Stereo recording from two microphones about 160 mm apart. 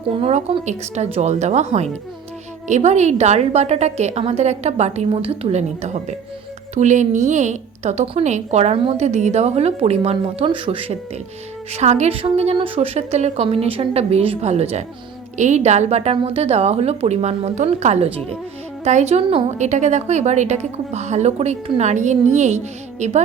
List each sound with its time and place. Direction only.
0.1 s a woman's voice: 40° right (ahead or behind)